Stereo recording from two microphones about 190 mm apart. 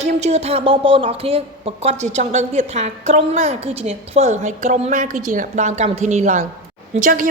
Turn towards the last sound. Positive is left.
turn(degrees=-45)  # may be behind; listen again after turning